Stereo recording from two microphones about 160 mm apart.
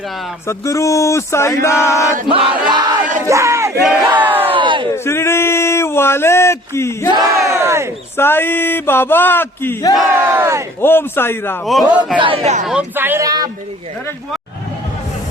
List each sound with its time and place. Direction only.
0.4 s a sound: 20° left (ahead or behind)
1.6 s speech: 15° left (ahead or behind)
2.3 s battle cry: 30° right (ahead or behind); by 4.5 s 10° right (ahead or behind)
4.5 s crowd: 30° right (ahead or behind)
5.0 s speech: 15° left (ahead or behind)
7.1 s speech: 20° right (ahead or behind)
8.1 s speech: 15° left (ahead or behind)
10.2 s speech: 15° right (ahead or behind)
10.8 s speech: 15° left (ahead or behind)
11.6 s a man's voice: centre (ahead or behind)
12.2 s speech: 40° right (ahead or behind)
12.6 s speech: 10° right (ahead or behind)